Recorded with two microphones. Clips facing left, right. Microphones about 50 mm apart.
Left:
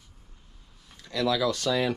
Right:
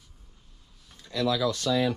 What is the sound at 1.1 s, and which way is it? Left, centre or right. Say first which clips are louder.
Speech: left 1 dB; left.